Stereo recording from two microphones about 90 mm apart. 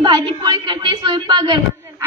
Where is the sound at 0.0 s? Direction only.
60° right (ahead or behind).